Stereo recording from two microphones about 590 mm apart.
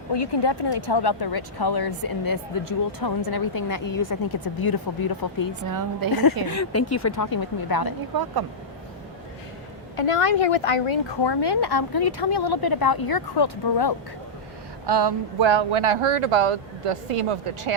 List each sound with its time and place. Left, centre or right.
0.1 s speech: left
5.6 s a woman's voice: right
6.5 s speech: left
9.9 s speech: left
14.8 s speech: right